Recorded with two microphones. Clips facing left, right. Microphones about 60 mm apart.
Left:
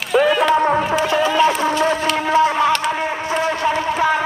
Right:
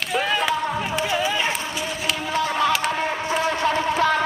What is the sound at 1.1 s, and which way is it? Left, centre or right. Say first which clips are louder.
Chicken: left 9 dB; left.